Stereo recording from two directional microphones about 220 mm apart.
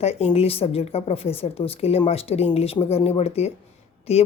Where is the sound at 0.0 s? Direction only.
30° left (ahead or behind).